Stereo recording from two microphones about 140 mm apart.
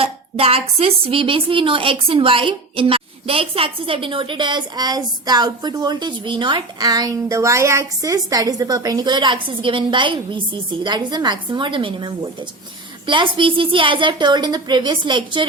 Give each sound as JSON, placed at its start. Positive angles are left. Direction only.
{"t": 0.0, "sound": "a woman's voice", "side_deg": -45}